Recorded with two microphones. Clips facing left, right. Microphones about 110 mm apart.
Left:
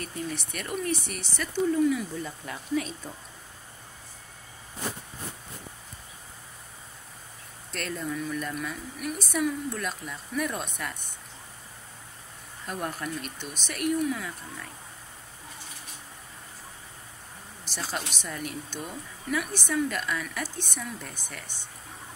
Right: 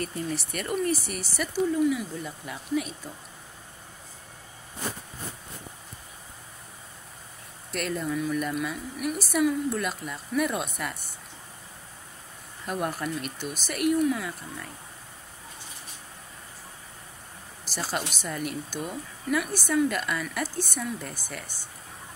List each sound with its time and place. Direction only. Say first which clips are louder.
0.0 s a woman's voice: right 3 dB; centre (ahead or behind)
7.7 s a woman's voice: right 4 dB; 5° right (ahead or behind)
12.6 s a woman's voice: right 3 dB; 5° right (ahead or behind)
17.6 s a woman's voice: right 3 dB; 5° right (ahead or behind)